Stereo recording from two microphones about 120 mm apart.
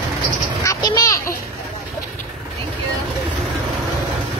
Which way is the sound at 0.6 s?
30° left (ahead or behind).